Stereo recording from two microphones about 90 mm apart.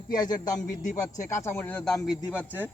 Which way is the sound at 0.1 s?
45° left (ahead or behind).